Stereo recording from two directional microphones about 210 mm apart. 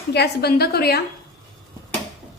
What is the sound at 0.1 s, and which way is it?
Speech, 50° left (ahead or behind).